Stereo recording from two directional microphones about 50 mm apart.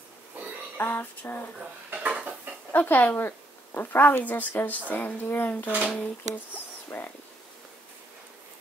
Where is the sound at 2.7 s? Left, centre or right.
Left.